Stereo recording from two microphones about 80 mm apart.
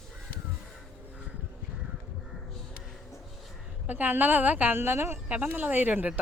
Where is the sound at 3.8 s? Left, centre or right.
Right.